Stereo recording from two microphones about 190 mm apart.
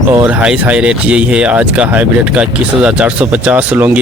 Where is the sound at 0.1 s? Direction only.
20° right (ahead or behind).